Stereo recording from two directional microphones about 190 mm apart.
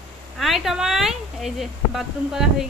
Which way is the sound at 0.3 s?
Centre (ahead or behind).